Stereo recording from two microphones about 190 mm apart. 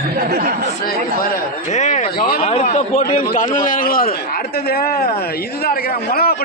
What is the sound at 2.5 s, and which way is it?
A man's voice, 35° left (ahead or behind).